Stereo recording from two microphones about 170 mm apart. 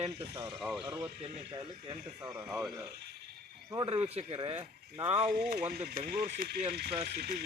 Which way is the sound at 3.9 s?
35° right (ahead or behind).